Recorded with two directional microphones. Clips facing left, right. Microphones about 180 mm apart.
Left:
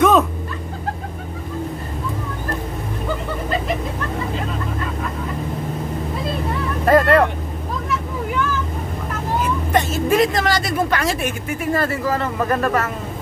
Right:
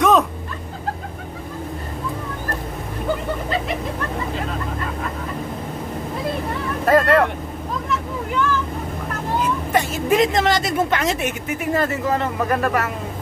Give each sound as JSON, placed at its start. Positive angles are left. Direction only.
{"t": 0.0, "sound": "vehicle", "side_deg": 0}
{"t": 6.9, "sound": "vehicle", "side_deg": 0}
{"t": 9.7, "sound": "a woman's voice", "side_deg": -10}
{"t": 12.4, "sound": "speech", "side_deg": -10}